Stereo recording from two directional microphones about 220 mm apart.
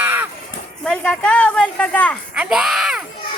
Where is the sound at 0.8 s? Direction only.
5° left (ahead or behind).